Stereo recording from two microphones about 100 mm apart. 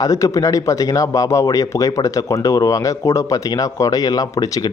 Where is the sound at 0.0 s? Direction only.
35° left (ahead or behind).